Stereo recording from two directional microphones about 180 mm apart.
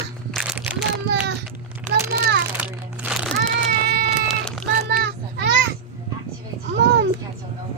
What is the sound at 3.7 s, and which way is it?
Cat, 65° right (ahead or behind).